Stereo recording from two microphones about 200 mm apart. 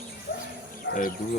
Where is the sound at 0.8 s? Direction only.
45° left (ahead or behind).